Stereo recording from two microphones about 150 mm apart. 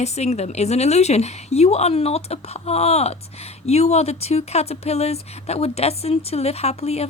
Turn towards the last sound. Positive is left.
turn(degrees=45)  # may be behind; listen again after turning